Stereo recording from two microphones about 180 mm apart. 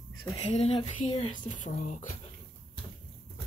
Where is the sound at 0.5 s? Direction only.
35° left (ahead or behind).